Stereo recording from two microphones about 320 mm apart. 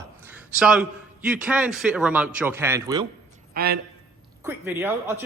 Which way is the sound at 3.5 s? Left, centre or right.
Right.